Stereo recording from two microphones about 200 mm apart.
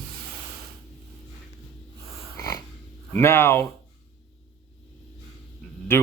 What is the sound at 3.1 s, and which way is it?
Speech, 10° left (ahead or behind).